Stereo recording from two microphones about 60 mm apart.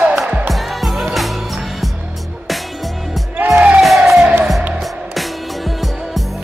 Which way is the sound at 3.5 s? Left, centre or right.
Right.